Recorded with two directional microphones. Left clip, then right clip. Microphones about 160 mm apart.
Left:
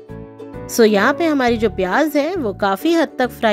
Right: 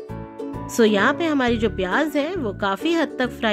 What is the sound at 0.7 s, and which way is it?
A woman's voice, 35° left (ahead or behind).